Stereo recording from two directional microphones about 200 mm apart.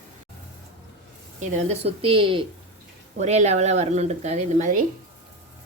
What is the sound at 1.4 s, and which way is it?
Speech, 35° right (ahead or behind).